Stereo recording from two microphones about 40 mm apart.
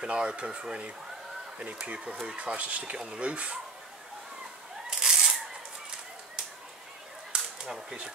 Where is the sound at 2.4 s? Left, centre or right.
Right.